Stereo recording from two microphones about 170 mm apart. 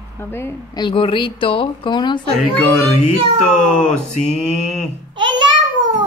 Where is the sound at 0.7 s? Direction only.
30° left (ahead or behind).